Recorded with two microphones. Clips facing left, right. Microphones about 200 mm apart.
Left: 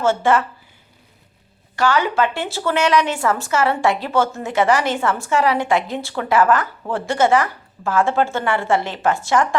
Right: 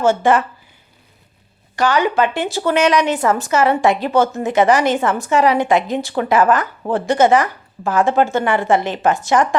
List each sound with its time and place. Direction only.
0.0 s a woman's voice: 15° right (ahead or behind)
1.7 s speech: 15° right (ahead or behind)